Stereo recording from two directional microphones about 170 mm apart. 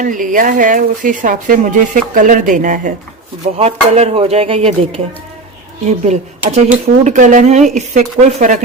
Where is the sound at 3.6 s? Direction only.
40° right (ahead or behind).